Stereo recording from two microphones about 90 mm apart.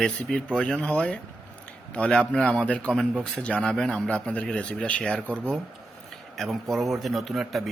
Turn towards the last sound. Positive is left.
turn(degrees=0)  # may be behind; listen again after turning